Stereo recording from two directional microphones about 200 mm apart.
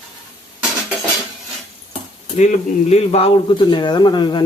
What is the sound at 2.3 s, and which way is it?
Speech, 35° left (ahead or behind).